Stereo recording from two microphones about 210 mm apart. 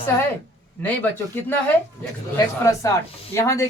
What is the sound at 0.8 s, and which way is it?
Speech, 10° left (ahead or behind).